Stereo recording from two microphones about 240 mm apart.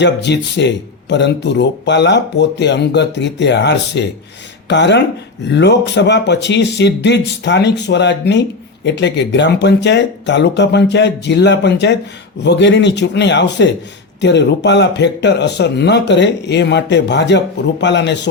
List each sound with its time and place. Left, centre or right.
0.0 s speech: left